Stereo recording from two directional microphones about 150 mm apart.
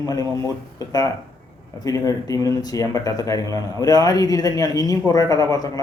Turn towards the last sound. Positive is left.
turn(degrees=25)  # may be behind; listen again after turning